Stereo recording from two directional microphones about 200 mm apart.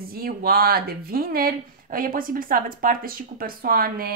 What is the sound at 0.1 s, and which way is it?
Speech, 50° right (ahead or behind).